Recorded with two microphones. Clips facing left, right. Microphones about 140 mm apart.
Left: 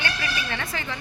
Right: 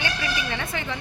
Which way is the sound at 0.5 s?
5° right (ahead or behind).